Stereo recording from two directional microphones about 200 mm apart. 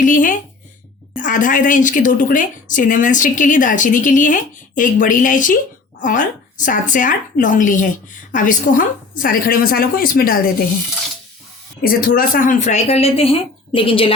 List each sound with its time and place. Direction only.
0.0 s a woman's voice: 40° left (ahead or behind)
11.8 s a woman's voice: 45° left (ahead or behind); by 14.1 s 25° left (ahead or behind)